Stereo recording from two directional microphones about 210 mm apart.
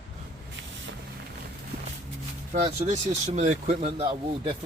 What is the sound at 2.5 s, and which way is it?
Speech, 35° right (ahead or behind).